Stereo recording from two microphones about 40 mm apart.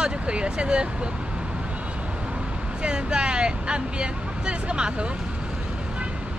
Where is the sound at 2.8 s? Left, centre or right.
Right.